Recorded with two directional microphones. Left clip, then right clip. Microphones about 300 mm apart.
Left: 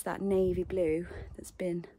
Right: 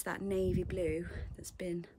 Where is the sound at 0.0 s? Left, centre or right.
Centre.